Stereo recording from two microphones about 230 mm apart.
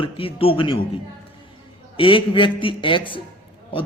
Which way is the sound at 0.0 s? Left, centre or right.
Left.